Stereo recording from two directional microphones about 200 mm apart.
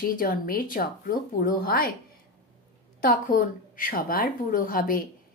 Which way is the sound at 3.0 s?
45° left (ahead or behind).